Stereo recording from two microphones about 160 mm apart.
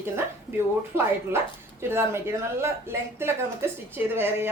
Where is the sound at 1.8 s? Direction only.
15° right (ahead or behind).